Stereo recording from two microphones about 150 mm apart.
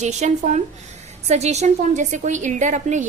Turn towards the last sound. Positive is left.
turn(degrees=-55)  # may be behind; listen again after turning